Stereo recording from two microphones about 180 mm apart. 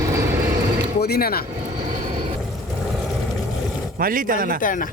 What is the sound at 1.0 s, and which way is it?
Speech, 60° left (ahead or behind).